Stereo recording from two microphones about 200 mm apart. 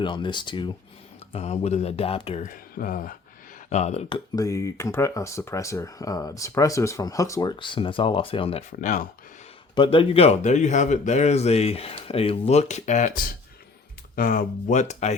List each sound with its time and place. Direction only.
0.0 s speech: 25° left (ahead or behind)
2.7 s speech: 45° left (ahead or behind)
4.4 s speech: 15° left (ahead or behind); by 9.0 s 40° left (ahead or behind)
9.7 s speech: 25° left (ahead or behind)